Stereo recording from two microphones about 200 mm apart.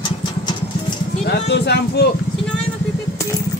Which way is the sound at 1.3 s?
55° left (ahead or behind).